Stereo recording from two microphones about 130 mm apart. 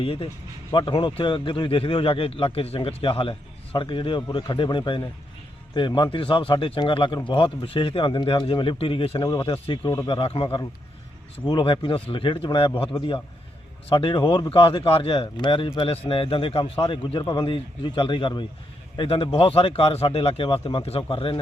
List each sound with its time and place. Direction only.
0.0 s a man's voice: 45° left (ahead or behind)
9.5 s a man's voice: 45° left (ahead or behind)